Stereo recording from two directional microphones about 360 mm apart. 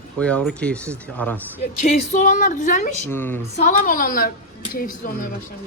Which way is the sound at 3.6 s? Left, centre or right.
Left.